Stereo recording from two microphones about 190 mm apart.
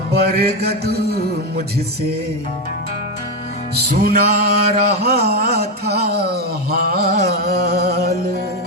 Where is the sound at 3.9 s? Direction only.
55° right (ahead or behind).